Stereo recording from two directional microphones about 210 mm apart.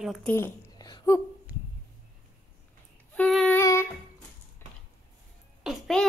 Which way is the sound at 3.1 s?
Centre (ahead or behind).